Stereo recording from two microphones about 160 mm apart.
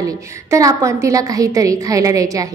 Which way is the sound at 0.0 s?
20° right (ahead or behind).